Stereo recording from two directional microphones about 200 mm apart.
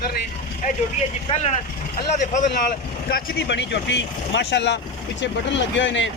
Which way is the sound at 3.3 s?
60° left (ahead or behind).